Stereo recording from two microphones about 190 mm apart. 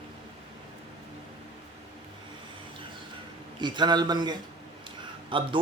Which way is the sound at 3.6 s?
25° right (ahead or behind).